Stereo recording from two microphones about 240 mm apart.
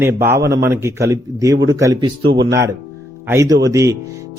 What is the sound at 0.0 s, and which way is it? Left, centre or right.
Speech, centre.